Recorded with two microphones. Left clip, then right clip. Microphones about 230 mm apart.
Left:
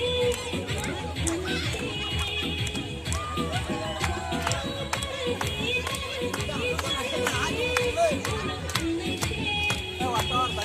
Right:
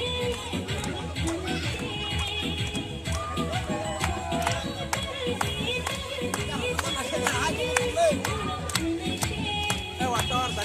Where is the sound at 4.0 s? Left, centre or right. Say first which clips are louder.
Right 1 dB; right.